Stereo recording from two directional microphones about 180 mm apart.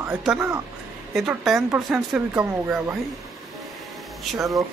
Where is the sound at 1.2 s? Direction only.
Centre (ahead or behind).